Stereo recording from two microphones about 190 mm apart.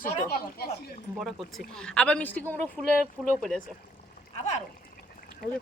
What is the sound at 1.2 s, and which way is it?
Speech, centre (ahead or behind).